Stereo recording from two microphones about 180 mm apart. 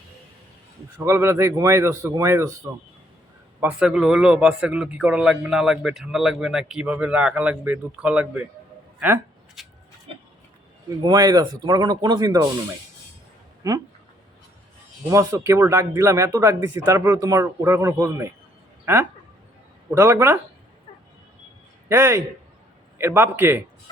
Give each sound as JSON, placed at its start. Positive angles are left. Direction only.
{"t": 0.9, "sound": "speech", "side_deg": -15}
{"t": 3.6, "sound": "a man's voice", "side_deg": -5}
{"t": 9.0, "sound": "a sound", "side_deg": -10}
{"t": 11.0, "sound": "speech", "side_deg": -20}
{"t": 13.6, "sound": "speech", "side_deg": -20}
{"t": 15.1, "sound": "speech", "side_deg": -15}
{"t": 21.8, "sound": "speech", "side_deg": -15}